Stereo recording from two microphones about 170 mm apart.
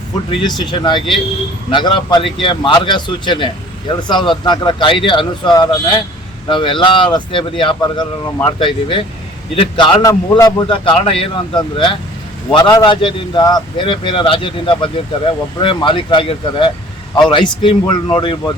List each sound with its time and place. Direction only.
0.3 s a man's voice: 25° left (ahead or behind)
10.7 s a man's voice: 30° left (ahead or behind)